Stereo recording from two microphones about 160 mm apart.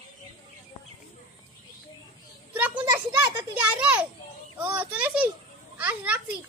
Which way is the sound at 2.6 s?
10° right (ahead or behind).